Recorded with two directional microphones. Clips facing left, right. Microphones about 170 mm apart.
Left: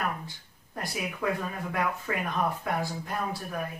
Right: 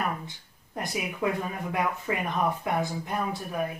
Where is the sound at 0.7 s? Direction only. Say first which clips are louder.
Right 3 dB; 20° right (ahead or behind).